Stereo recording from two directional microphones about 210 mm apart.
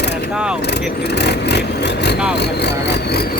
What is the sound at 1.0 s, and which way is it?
Speech, 55° left (ahead or behind).